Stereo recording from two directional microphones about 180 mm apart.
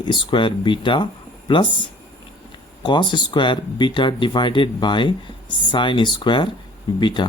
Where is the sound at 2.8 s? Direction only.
25° left (ahead or behind).